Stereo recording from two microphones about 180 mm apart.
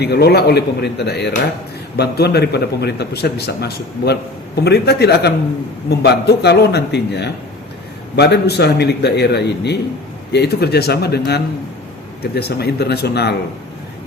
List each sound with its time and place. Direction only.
0.0 s a man's voice: 65° left (ahead or behind)